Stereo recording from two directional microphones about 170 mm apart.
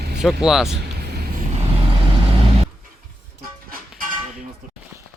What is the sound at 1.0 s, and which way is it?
Vehicle, 70° right (ahead or behind).